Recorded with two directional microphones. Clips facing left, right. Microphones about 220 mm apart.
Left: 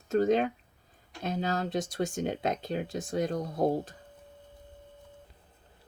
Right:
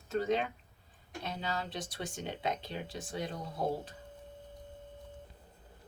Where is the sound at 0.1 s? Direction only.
45° left (ahead or behind).